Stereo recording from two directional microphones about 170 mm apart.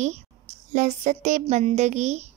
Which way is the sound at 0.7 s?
45° right (ahead or behind).